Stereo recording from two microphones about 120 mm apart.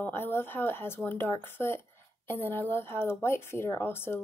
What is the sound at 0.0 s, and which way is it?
Speech, 20° left (ahead or behind).